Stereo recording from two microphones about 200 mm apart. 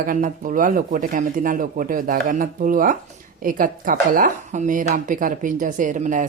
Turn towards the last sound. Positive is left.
turn(degrees=-40)  # may be behind; listen again after turning